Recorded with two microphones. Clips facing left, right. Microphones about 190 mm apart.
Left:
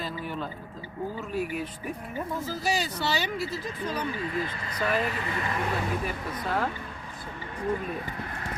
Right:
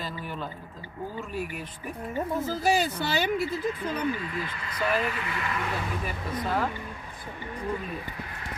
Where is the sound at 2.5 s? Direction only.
55° right (ahead or behind).